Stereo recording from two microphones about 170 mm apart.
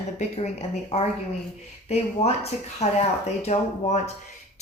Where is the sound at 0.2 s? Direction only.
40° left (ahead or behind).